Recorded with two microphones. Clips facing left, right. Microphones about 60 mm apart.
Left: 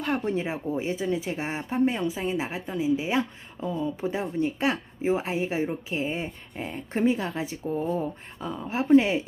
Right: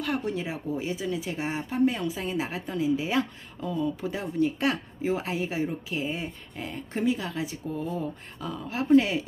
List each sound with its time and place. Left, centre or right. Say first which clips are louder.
0.0 s speech: left 2 dB; left